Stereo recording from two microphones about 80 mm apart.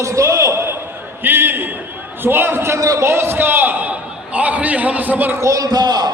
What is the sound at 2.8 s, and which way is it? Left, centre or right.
A man's voice, right.